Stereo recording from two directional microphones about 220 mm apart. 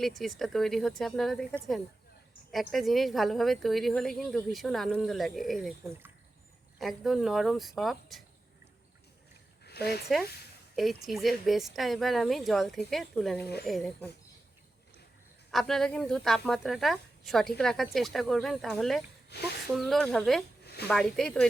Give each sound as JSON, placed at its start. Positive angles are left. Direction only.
{"t": 0.0, "sound": "speech", "side_deg": 0}
{"t": 2.5, "sound": "speech", "side_deg": 0}
{"t": 9.6, "sound": "a sound", "side_deg": 45}
{"t": 10.8, "sound": "speech", "side_deg": 0}
{"t": 15.5, "sound": "speech", "side_deg": 0}
{"t": 19.3, "sound": "speech", "side_deg": 50}
{"t": 19.7, "sound": "speech", "side_deg": 0}